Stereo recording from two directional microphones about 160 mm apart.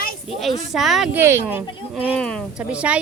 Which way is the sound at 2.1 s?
5° left (ahead or behind).